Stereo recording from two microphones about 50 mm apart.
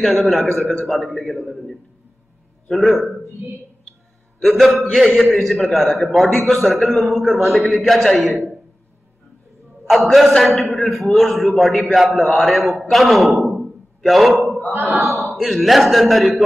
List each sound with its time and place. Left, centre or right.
0.0 s a man's voice: centre
3.4 s a woman's voice: right
4.4 s a man's voice: centre
9.8 s a man's voice: centre